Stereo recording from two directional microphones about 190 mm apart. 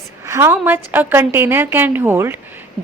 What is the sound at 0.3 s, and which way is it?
A woman's voice, 15° right (ahead or behind).